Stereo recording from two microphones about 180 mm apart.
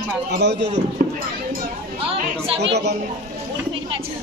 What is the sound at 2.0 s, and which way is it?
Speech, 30° right (ahead or behind).